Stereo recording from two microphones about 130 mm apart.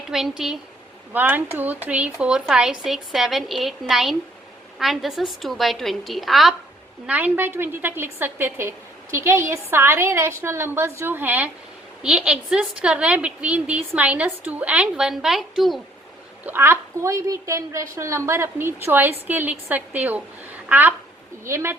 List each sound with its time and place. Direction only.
0.1 s a woman's voice: 5° right (ahead or behind)
7.1 s a woman's voice: 15° right (ahead or behind)
16.5 s a woman's voice: 20° right (ahead or behind)